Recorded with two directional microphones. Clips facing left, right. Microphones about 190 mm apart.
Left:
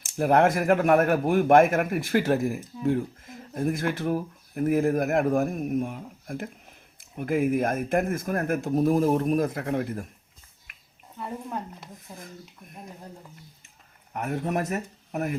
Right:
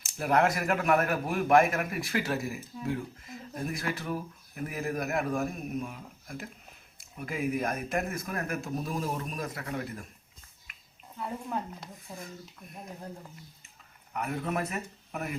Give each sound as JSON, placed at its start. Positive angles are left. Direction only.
{"t": 0.2, "sound": "speech", "side_deg": 50}
{"t": 10.7, "sound": "a sound", "side_deg": 55}
{"t": 11.2, "sound": "speech", "side_deg": 0}
{"t": 14.1, "sound": "speech", "side_deg": 45}